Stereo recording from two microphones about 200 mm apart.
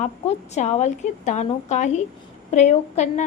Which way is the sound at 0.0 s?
35° left (ahead or behind).